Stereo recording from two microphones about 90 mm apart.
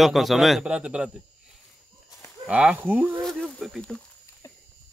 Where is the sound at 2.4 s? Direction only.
15° right (ahead or behind).